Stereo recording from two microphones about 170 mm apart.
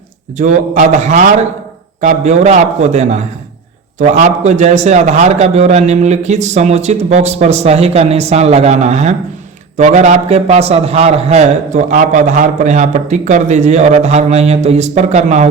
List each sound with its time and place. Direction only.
0.3 s a man's voice: 45° right (ahead or behind)